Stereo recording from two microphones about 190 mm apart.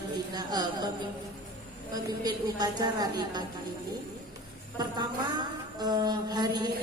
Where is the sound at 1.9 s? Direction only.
20° right (ahead or behind).